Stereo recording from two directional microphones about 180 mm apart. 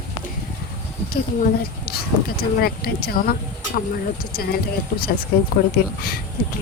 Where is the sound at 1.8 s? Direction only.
60° left (ahead or behind).